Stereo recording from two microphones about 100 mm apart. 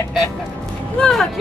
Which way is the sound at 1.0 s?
5° left (ahead or behind).